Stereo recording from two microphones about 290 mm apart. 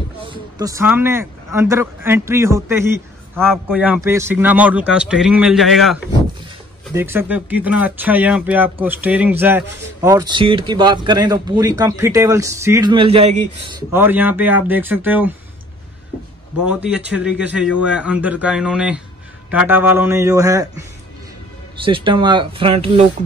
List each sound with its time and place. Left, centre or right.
0.3 s a man's voice: centre
16.6 s a man's voice: centre
21.8 s speech: centre